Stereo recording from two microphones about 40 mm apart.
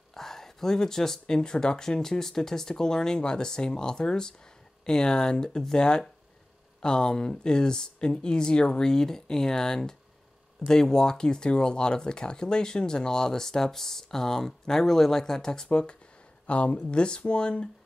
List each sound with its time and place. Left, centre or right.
0.1 s a sound: centre
1.2 s speech: centre
16.4 s speech: left